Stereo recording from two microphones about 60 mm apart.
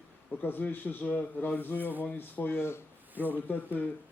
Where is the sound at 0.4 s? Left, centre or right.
Left.